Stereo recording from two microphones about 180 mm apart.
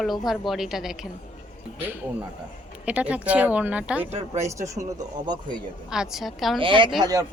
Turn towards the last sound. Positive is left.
turn(degrees=-20)  # may be behind; listen again after turning